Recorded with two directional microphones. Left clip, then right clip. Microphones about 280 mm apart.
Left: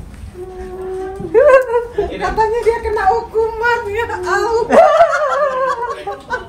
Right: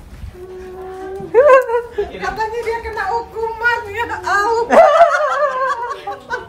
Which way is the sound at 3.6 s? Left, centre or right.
Centre.